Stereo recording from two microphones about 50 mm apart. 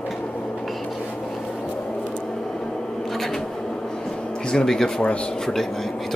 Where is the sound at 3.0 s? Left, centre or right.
Centre.